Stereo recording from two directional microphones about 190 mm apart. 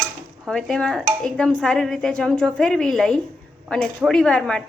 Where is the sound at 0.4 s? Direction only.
5° left (ahead or behind).